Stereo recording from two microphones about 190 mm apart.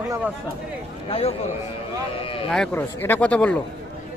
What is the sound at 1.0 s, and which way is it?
A man's voice, 30° left (ahead or behind).